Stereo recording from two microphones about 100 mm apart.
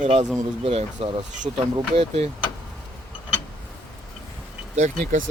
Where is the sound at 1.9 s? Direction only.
90° right.